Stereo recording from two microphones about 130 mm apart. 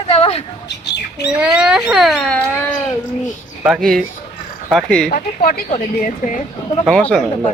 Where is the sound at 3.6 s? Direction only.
Centre (ahead or behind).